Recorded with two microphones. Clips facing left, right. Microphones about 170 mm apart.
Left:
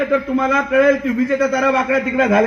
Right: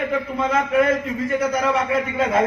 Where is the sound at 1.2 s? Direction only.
75° left (ahead or behind).